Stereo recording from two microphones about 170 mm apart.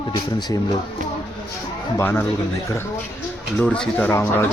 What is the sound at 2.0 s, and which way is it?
Speech, 15° left (ahead or behind).